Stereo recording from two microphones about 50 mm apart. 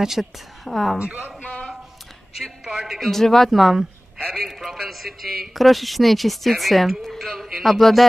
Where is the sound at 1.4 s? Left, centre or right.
Left.